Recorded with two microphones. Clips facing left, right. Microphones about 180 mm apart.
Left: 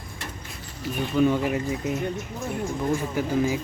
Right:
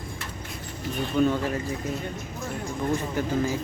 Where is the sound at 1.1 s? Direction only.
10° left (ahead or behind).